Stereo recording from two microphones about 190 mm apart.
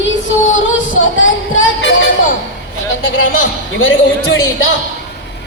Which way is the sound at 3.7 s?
90° left.